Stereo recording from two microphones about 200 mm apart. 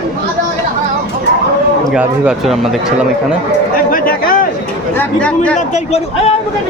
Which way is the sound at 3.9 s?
45° left (ahead or behind).